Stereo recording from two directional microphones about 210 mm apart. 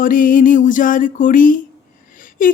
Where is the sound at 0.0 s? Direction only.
40° left (ahead or behind).